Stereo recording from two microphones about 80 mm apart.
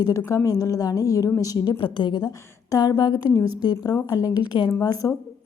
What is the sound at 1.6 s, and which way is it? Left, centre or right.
Speech, left.